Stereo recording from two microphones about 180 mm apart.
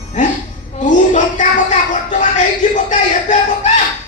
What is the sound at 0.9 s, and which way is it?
Music, 45° left (ahead or behind).